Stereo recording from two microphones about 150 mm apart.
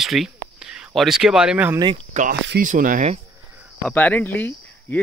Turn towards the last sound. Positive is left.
turn(degrees=15)  # may be behind; listen again after turning